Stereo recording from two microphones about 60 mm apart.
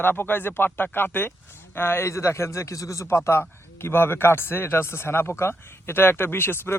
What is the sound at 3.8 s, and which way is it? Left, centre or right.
Speech, left.